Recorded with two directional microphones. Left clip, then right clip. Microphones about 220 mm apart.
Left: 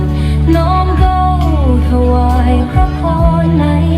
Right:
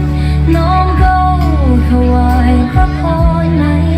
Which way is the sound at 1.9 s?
40° right (ahead or behind).